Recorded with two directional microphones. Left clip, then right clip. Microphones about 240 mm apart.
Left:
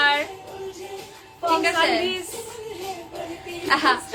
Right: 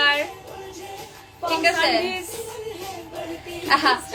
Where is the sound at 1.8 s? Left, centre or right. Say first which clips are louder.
Even; left.